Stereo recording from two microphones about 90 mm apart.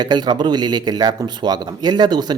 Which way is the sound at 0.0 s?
50° right (ahead or behind).